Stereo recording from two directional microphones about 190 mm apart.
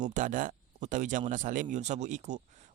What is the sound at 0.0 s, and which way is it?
Speech, 40° right (ahead or behind).